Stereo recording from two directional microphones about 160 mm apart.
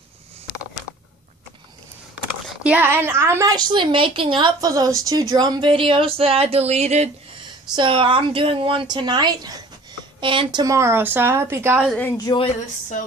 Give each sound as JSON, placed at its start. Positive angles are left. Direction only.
{"t": 2.4, "sound": "a woman's voice", "side_deg": -10}
{"t": 7.7, "sound": "a woman's voice", "side_deg": -30}
{"t": 12.3, "sound": "a woman's voice", "side_deg": 25}